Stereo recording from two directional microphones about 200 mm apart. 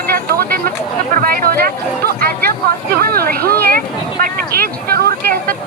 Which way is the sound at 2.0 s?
50° right (ahead or behind).